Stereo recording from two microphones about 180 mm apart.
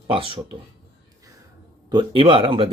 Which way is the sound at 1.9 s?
30° right (ahead or behind).